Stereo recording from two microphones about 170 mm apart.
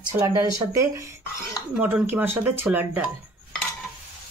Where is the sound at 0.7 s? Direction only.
20° right (ahead or behind).